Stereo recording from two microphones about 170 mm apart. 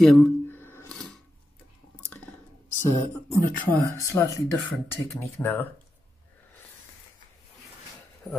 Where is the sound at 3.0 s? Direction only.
15° left (ahead or behind).